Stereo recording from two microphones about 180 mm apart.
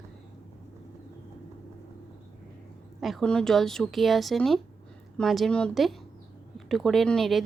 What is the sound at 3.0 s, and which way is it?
Speech, centre (ahead or behind).